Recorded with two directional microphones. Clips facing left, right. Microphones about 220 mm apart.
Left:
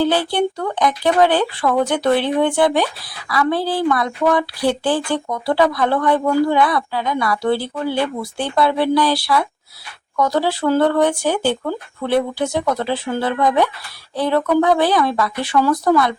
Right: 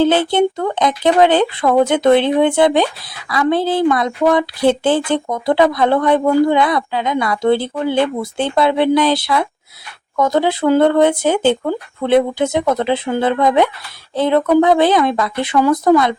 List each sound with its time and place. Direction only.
0.0 s speech: 20° right (ahead or behind)